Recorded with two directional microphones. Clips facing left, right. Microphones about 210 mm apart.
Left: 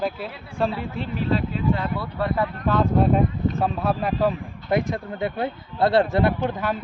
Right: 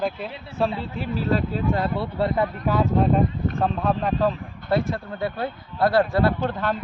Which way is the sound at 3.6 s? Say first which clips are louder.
Right 2 dB; 5° left (ahead or behind).